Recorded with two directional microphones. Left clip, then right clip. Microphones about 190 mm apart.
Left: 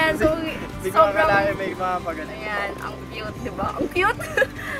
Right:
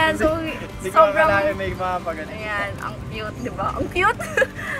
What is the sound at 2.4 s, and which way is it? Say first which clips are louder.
A woman's voice: right 1 dB; 10° left (ahead or behind).